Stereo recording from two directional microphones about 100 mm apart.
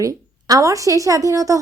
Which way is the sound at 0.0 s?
35° right (ahead or behind).